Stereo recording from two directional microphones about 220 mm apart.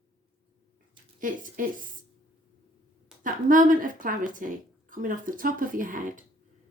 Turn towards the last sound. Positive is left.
turn(degrees=-40)  # may be behind; listen again after turning